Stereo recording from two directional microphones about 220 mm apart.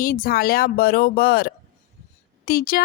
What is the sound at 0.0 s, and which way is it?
A woman's voice, 40° left (ahead or behind).